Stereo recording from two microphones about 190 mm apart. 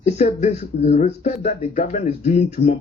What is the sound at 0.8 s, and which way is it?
Speech, 55° left (ahead or behind).